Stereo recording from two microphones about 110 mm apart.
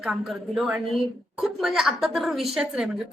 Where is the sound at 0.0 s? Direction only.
5° right (ahead or behind).